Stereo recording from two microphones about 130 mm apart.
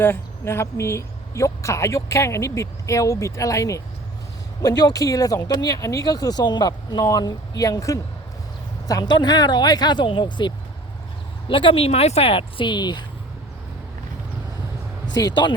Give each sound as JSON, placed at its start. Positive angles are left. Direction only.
{"t": 0.0, "sound": "speech", "side_deg": 20}
{"t": 15.1, "sound": "speech", "side_deg": 30}